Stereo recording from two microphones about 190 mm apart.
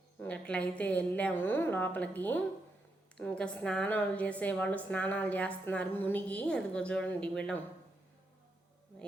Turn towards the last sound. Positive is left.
turn(degrees=5)  # may be behind; listen again after turning